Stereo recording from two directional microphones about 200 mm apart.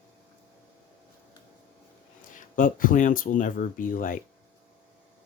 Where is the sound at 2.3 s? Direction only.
40° left (ahead or behind).